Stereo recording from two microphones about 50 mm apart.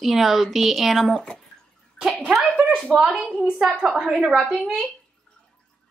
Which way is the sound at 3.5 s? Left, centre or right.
Centre.